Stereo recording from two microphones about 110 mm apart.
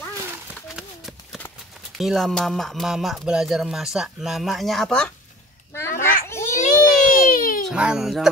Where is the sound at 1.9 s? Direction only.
Centre (ahead or behind).